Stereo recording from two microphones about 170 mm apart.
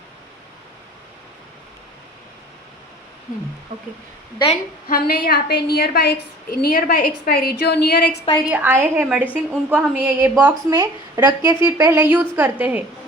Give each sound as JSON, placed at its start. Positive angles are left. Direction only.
{"t": 4.9, "sound": "a woman's voice", "side_deg": 60}
{"t": 8.4, "sound": "a woman's voice", "side_deg": -10}